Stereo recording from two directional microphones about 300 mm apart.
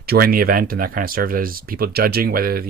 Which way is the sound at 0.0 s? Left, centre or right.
Right.